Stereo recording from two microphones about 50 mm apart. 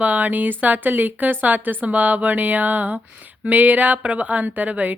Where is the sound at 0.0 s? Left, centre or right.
Right.